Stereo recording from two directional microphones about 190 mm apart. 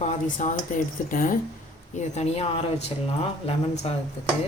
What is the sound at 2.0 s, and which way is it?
Speech, 35° left (ahead or behind).